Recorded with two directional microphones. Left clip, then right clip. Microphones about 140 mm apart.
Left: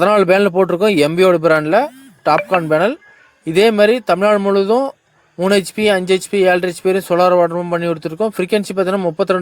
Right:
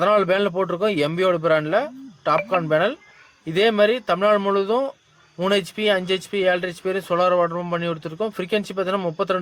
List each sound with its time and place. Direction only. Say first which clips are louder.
0.0 s speech: left 6 dB; 45° left (ahead or behind)